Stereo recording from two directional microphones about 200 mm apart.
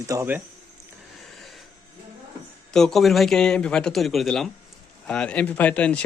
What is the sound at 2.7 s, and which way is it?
Speech, centre (ahead or behind).